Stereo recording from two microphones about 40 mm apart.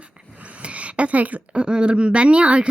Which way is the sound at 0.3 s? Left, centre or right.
Right.